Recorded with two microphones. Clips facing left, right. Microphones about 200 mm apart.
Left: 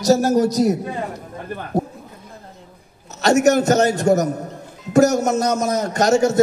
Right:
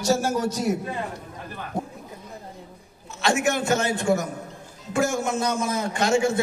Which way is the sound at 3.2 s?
40° left (ahead or behind).